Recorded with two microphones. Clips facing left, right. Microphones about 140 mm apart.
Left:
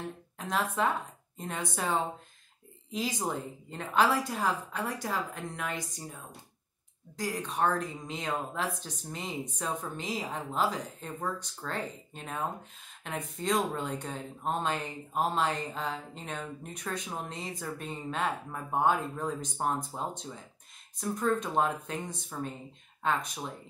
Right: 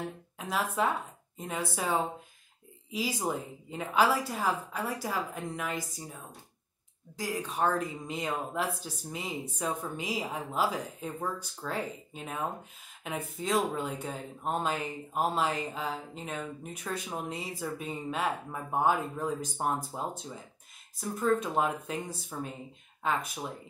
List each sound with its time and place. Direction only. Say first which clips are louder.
0.4 s a woman's voice: even; 5° right (ahead or behind)
7.2 s speech: even; 5° right (ahead or behind)